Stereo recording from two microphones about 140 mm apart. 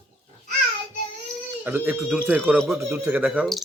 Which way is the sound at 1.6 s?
15° right (ahead or behind).